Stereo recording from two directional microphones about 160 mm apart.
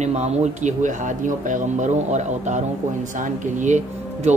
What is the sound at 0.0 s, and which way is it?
A man's voice, 45° right (ahead or behind).